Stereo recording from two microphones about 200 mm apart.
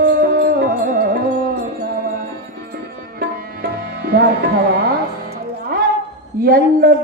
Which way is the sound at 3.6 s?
50° right (ahead or behind).